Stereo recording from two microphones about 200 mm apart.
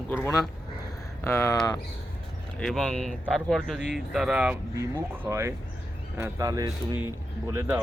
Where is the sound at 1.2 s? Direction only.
10° left (ahead or behind).